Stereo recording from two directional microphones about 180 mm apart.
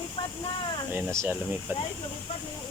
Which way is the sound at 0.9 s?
15° right (ahead or behind).